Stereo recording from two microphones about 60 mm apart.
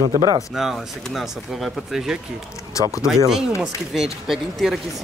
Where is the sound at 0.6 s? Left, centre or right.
Centre.